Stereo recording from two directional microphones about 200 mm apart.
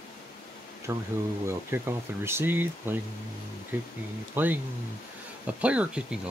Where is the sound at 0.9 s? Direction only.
10° right (ahead or behind).